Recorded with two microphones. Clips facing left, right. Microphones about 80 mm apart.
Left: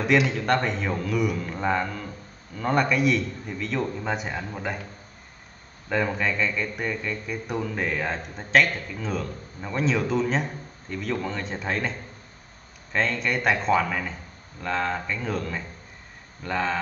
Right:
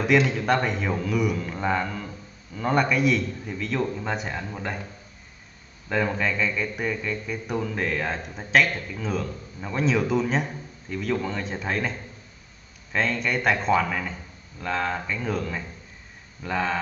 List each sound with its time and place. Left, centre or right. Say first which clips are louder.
0.0 s speech: right 1 dB; centre
5.9 s speech: even; centre